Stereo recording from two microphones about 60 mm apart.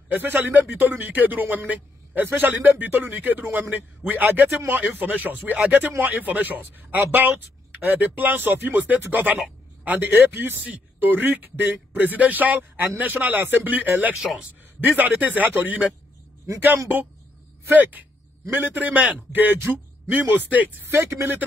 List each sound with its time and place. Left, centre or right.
0.1 s a man's voice: right
14.2 s speech: centre
14.8 s speech: right
17.6 s a man's voice: right